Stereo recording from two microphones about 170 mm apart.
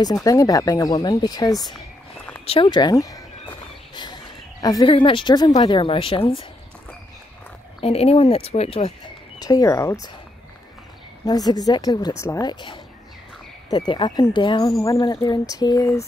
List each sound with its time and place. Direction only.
0.0 s a woman's voice: 20° left (ahead or behind)
7.8 s speech: 35° left (ahead or behind)
9.4 s speech: 20° left (ahead or behind)
11.2 s speech: 25° left (ahead or behind)